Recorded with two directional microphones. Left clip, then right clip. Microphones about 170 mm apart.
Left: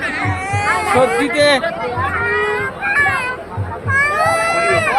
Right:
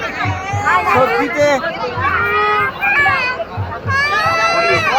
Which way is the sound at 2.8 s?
70° left (ahead or behind).